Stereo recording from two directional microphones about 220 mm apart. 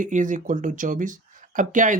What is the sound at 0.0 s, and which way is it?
Speech, 35° right (ahead or behind).